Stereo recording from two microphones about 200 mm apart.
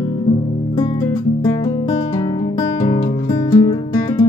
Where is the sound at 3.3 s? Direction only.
20° left (ahead or behind).